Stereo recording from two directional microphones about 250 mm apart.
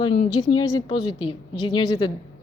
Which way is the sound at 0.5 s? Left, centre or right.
Centre.